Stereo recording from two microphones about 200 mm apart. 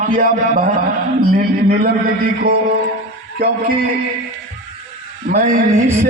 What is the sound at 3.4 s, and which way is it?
Speech, 50° right (ahead or behind).